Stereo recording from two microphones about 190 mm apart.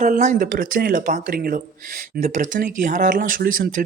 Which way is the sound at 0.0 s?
40° right (ahead or behind).